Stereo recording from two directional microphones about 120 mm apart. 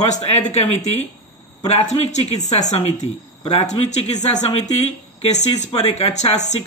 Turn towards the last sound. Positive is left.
turn(degrees=65)  # may be behind; listen again after turning